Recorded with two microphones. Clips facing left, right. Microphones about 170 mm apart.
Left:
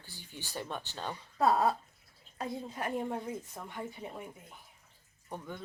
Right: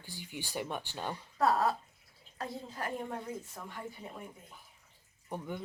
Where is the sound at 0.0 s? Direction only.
15° right (ahead or behind).